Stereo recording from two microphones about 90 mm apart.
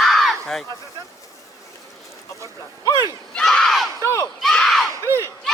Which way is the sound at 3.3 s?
10° left (ahead or behind).